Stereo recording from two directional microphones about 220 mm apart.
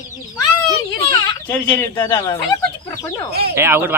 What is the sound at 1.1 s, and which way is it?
Speech, 10° left (ahead or behind).